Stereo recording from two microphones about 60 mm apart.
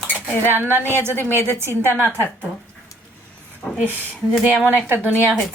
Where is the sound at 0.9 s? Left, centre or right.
Right.